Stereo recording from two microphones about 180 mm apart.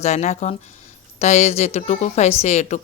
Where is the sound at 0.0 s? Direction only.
40° left (ahead or behind).